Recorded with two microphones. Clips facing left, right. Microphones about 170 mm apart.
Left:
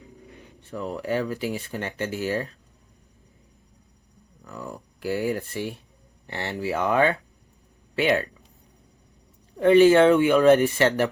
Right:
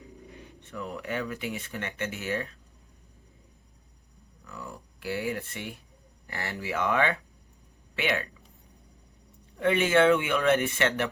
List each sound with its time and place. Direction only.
0.7 s speech: 35° left (ahead or behind)
4.4 s a sound: 40° left (ahead or behind)
6.2 s speech: 25° left (ahead or behind)
9.6 s speech: 35° left (ahead or behind)